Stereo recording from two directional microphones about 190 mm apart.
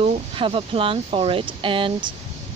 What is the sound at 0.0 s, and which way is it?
Speech, 30° right (ahead or behind).